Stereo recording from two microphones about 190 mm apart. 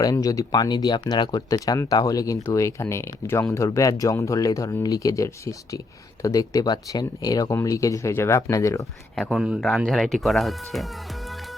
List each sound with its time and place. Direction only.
0.0 s speech: 20° left (ahead or behind)
9.3 s speech: 5° right (ahead or behind)